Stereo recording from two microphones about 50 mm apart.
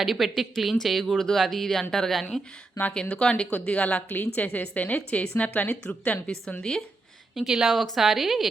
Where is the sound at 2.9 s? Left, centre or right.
Left.